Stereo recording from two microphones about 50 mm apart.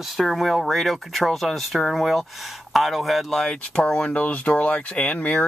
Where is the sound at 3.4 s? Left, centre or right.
Centre.